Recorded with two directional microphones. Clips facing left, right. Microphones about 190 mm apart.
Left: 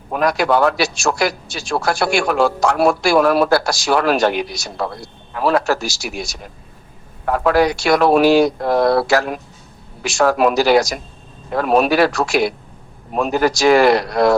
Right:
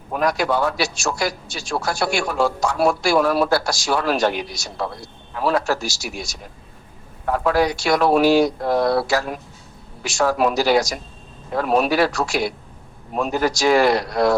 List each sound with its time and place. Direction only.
0.1 s a man's voice: 75° left (ahead or behind)
7.3 s speech: 70° left (ahead or behind)